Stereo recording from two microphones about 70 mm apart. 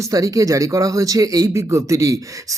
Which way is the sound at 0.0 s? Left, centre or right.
Right.